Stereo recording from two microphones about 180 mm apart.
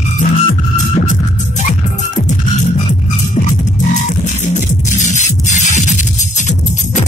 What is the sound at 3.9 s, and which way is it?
Music, 40° left (ahead or behind).